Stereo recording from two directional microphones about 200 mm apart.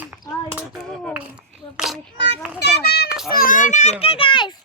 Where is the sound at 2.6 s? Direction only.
55° left (ahead or behind).